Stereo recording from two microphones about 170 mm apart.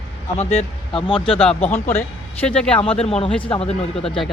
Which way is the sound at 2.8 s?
35° left (ahead or behind).